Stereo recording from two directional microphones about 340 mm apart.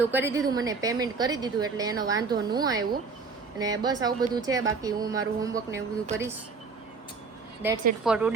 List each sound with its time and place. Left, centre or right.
0.0 s speech: centre
7.6 s a woman's voice: centre